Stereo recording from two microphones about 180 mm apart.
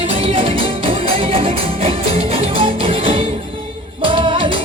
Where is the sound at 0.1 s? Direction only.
30° right (ahead or behind).